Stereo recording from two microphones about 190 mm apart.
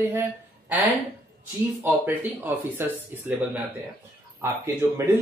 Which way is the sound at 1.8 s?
10° right (ahead or behind).